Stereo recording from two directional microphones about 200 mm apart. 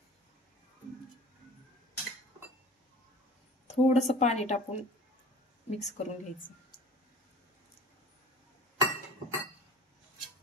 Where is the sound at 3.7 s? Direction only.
35° left (ahead or behind).